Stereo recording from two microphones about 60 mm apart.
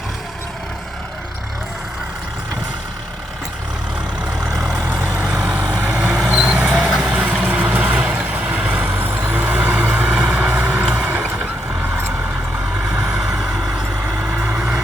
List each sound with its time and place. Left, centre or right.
4.5 s vehicle: centre
4.9 s vehicle: right
8.9 s vehicle: right; by 11.3 s centre
11.3 s vehicle: right; by 13.5 s centre
14.2 s vehicle: right